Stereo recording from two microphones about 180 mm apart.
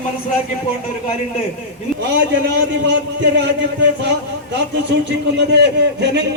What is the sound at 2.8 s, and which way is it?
A man's voice, 80° right.